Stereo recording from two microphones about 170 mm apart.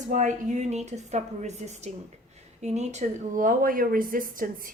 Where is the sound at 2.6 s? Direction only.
40° right (ahead or behind).